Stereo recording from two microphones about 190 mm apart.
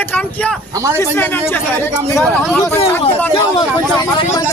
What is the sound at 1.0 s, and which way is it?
A man's voice, 10° left (ahead or behind).